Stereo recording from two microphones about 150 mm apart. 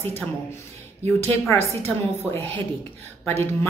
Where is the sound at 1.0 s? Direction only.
15° left (ahead or behind).